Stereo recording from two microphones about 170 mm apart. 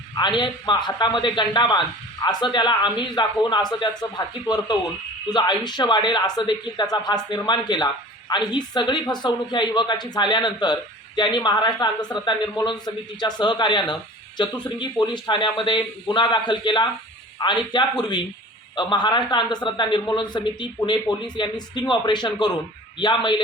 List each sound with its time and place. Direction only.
0.1 s speech: 25° left (ahead or behind)